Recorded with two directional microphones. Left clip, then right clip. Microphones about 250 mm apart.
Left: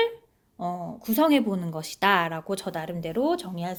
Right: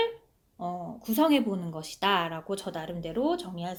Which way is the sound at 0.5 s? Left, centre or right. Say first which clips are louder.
Left 4 dB; left.